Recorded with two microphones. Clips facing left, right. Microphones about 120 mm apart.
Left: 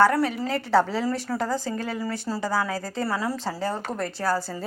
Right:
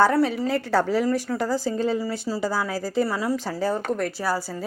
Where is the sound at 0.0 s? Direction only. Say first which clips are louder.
Right 1 dB; 20° right (ahead or behind).